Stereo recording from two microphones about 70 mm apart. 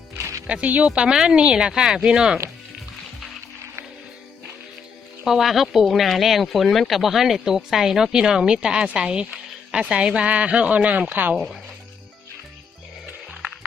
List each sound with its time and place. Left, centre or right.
0.2 s music: right
0.4 s speech: centre
5.2 s speech: centre; by 11.3 s right
13.3 s music: centre